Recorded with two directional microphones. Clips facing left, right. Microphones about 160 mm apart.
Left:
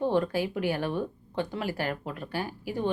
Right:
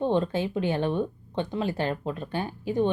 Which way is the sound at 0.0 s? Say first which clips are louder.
Right 1 dB; 20° right (ahead or behind).